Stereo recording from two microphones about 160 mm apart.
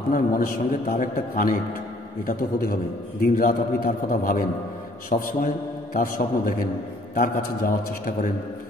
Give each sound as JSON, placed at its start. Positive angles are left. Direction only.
{"t": 0.1, "sound": "a man's voice", "side_deg": 60}
{"t": 2.2, "sound": "a man's voice", "side_deg": 65}